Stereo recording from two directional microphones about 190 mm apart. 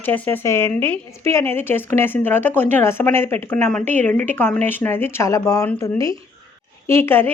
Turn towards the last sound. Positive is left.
turn(degrees=10)  # may be behind; listen again after turning